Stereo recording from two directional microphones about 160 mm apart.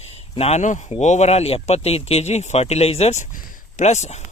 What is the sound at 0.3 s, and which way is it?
Speech, 40° left (ahead or behind).